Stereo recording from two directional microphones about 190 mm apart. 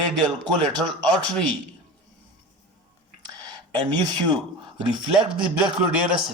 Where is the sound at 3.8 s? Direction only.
25° right (ahead or behind).